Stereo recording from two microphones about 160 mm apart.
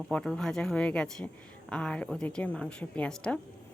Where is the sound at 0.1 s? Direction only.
5° left (ahead or behind).